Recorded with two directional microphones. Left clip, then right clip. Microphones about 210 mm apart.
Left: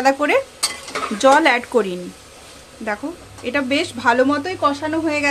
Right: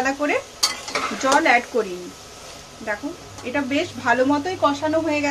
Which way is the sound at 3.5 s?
50° left (ahead or behind).